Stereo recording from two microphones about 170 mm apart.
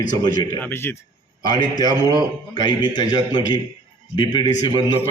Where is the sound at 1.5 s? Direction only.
25° left (ahead or behind).